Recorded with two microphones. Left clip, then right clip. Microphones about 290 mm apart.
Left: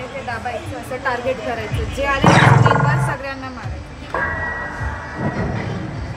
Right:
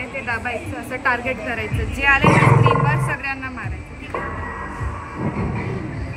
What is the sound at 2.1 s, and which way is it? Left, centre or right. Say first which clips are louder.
Speech: left 5 dB; left.